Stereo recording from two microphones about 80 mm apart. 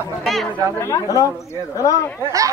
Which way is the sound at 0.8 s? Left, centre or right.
Left.